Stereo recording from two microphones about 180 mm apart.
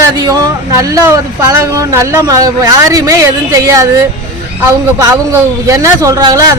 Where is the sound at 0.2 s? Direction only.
20° right (ahead or behind).